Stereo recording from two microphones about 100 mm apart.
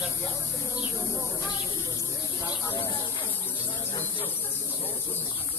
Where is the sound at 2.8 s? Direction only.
45° left (ahead or behind).